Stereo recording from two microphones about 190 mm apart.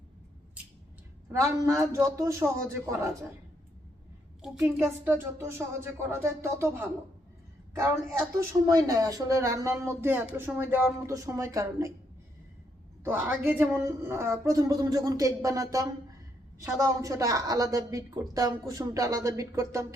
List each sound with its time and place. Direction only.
1.3 s speech: 15° right (ahead or behind)
4.4 s speech: 5° right (ahead or behind)
8.6 s speech: 20° right (ahead or behind)
13.1 s speech: 10° right (ahead or behind)